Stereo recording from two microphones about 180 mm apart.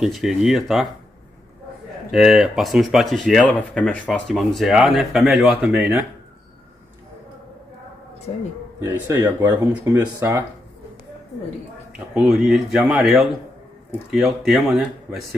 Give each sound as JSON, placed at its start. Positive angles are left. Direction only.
{"t": 0.0, "sound": "speech", "side_deg": 0}
{"t": 2.0, "sound": "speech", "side_deg": 0}
{"t": 8.3, "sound": "speech", "side_deg": 35}
{"t": 8.7, "sound": "speech", "side_deg": -15}
{"t": 12.1, "sound": "speech", "side_deg": 0}